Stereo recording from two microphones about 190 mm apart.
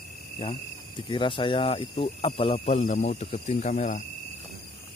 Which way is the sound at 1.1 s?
25° left (ahead or behind).